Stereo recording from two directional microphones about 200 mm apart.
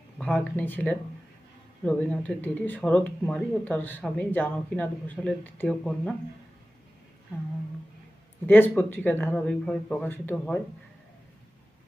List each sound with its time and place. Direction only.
0.2 s speech: 5° left (ahead or behind)
8.4 s speech: 10° left (ahead or behind)